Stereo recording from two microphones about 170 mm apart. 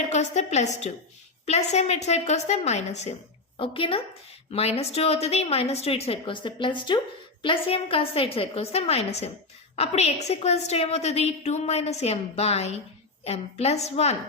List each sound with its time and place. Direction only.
0.1 s a woman's voice: 40° left (ahead or behind)